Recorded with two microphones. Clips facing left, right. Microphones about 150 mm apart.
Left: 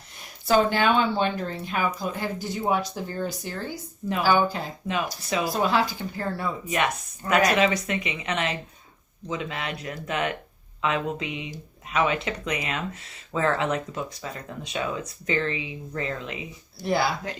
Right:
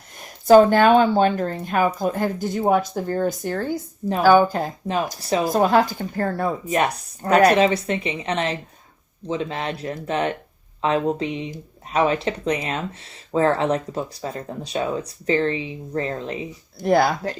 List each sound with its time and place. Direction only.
0.2 s speech: 45° right (ahead or behind)